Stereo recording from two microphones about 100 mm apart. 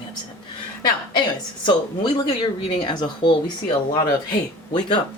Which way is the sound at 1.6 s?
50° left (ahead or behind).